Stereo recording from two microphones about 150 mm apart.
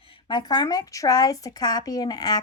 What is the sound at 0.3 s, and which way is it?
A woman's voice, 30° left (ahead or behind).